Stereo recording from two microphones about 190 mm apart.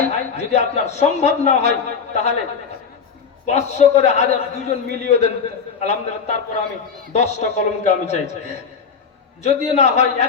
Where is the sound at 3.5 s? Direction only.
35° left (ahead or behind).